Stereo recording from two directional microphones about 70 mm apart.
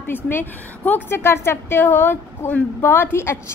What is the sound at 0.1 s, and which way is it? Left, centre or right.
A woman's voice, left.